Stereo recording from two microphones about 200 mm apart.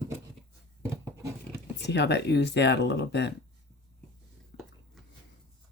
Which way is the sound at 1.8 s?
60° left (ahead or behind).